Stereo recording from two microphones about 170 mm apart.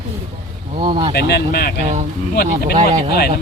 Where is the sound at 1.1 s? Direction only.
65° left (ahead or behind).